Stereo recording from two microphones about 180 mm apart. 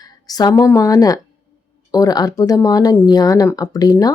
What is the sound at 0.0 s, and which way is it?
A woman's voice, 20° left (ahead or behind).